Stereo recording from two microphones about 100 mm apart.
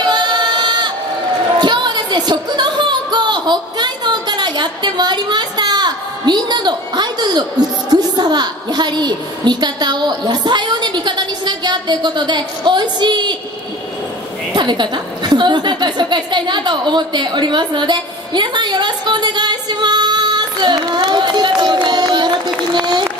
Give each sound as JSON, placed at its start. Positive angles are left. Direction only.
{"t": 0.0, "sound": "a sound", "side_deg": -50}
{"t": 7.9, "sound": "a woman's voice", "side_deg": -45}
{"t": 14.5, "sound": "a woman's voice", "side_deg": -50}
{"t": 22.8, "sound": "run", "side_deg": -50}